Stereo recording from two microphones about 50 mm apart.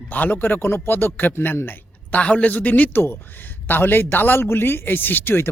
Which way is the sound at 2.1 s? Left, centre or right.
Left.